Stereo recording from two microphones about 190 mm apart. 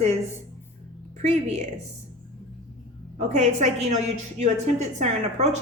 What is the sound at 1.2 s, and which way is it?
Speech, 35° right (ahead or behind).